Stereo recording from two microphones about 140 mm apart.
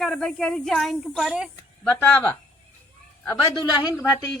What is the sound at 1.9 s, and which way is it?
Speech, 20° left (ahead or behind).